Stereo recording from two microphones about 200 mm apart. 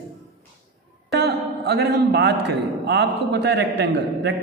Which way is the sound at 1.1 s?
55° right (ahead or behind).